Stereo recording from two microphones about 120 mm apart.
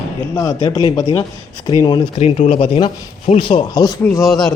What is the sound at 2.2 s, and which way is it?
Speech, 65° left (ahead or behind).